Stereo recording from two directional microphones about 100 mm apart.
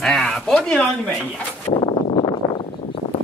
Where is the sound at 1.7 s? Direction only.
60° left (ahead or behind).